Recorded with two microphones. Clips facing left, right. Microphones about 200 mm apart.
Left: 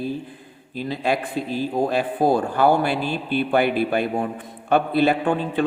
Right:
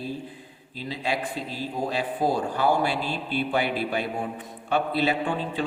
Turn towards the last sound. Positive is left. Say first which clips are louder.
# left 6 dB
turn(degrees=55)  # may be behind; listen again after turning